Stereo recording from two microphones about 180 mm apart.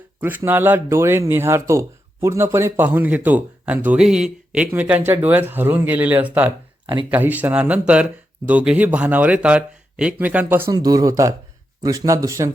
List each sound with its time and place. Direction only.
0.2 s speech: 10° right (ahead or behind)